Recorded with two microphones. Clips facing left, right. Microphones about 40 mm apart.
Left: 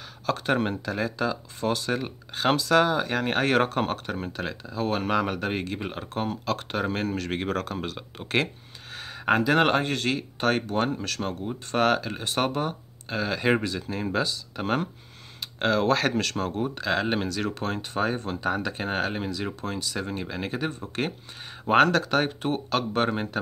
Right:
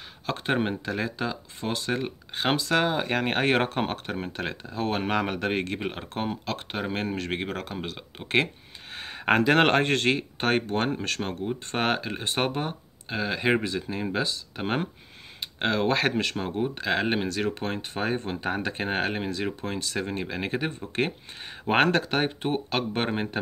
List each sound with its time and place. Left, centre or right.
0.3 s speech: right
8.9 s speech: right
10.1 s speech: right
20.1 s speech: right